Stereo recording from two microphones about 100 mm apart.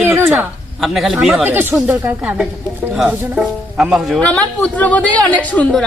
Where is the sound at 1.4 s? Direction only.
20° right (ahead or behind).